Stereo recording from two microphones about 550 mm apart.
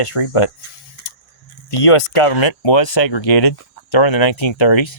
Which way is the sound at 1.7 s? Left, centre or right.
Left.